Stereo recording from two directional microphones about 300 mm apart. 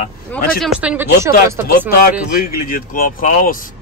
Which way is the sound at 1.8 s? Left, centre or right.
Left.